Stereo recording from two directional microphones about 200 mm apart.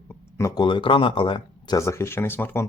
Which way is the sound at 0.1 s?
15° left (ahead or behind).